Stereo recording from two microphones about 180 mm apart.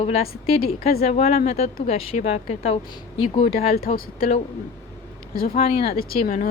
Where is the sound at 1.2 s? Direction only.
55° left (ahead or behind).